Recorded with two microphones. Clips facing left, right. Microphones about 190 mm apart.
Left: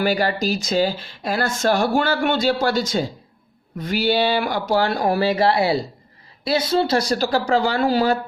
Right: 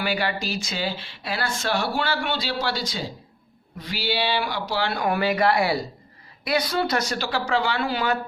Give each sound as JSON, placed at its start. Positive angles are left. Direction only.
{"t": 0.0, "sound": "speech", "side_deg": 40}